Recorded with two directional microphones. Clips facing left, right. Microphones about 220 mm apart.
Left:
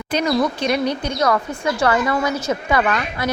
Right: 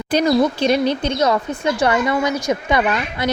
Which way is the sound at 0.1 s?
30° right (ahead or behind).